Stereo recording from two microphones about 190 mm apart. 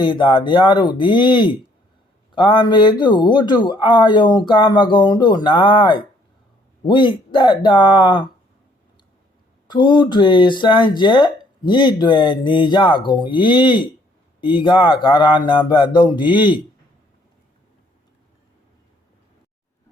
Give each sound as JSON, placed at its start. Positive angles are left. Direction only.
{"t": 0.0, "sound": "speech", "side_deg": 25}
{"t": 9.6, "sound": "speech", "side_deg": 25}